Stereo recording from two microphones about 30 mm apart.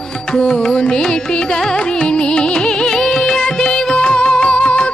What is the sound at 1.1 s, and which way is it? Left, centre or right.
Carnatic music, left.